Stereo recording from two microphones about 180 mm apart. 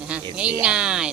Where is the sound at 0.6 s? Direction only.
5° right (ahead or behind).